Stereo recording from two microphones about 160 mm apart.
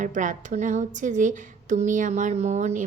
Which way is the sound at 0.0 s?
55° right (ahead or behind).